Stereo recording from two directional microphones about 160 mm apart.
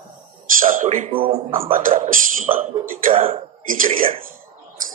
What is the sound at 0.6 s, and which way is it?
Speech, 55° right (ahead or behind).